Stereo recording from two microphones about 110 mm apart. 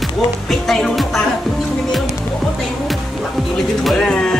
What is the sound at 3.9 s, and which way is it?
Speech, 5° left (ahead or behind).